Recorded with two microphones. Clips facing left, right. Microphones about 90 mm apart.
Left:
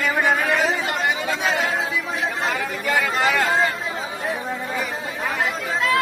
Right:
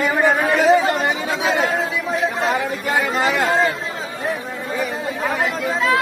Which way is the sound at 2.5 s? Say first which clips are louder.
Right 3 dB; 25° right (ahead or behind).